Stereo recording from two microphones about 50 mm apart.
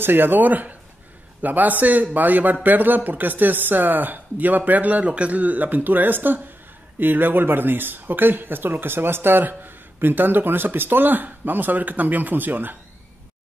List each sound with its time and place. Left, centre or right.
0.0 s speech: right